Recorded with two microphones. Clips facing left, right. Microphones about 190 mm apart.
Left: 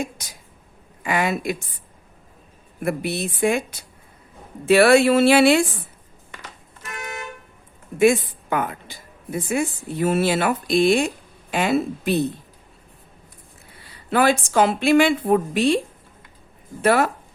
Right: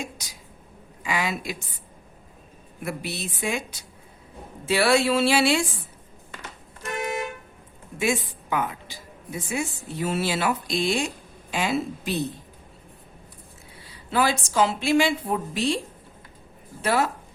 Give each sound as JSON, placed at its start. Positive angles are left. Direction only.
{"t": 0.0, "sound": "a sound", "side_deg": 55}
{"t": 1.0, "sound": "speech", "side_deg": 55}
{"t": 2.8, "sound": "a woman's voice", "side_deg": 55}
{"t": 7.9, "sound": "a woman's voice", "side_deg": 55}
{"t": 14.1, "sound": "a woman's voice", "side_deg": 60}
{"t": 16.8, "sound": "a woman's voice", "side_deg": 60}